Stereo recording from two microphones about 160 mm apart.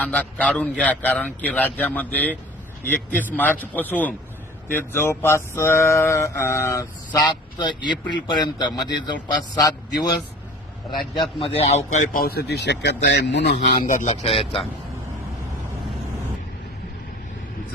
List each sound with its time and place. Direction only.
0.0 s male singing: 10° left (ahead or behind)
7.9 s a man's voice: 30° left (ahead or behind)
11.2 s a man's voice: 35° left (ahead or behind)
12.2 s speech: 80° left
13.6 s a man's voice: 50° left (ahead or behind)